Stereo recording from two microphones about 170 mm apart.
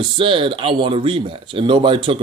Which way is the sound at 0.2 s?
30° right (ahead or behind).